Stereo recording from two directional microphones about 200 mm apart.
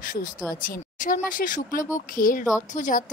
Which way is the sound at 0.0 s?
45° left (ahead or behind).